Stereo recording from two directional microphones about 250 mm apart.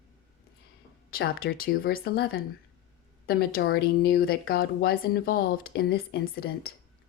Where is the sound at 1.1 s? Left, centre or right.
Left.